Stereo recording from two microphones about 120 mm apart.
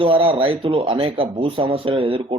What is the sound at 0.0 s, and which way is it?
Speech, 50° right (ahead or behind).